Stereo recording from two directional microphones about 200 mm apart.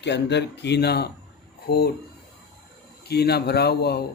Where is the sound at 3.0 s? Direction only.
55° left (ahead or behind).